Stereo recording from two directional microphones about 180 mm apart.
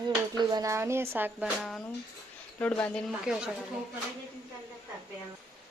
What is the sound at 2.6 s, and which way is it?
Speech, 5° left (ahead or behind).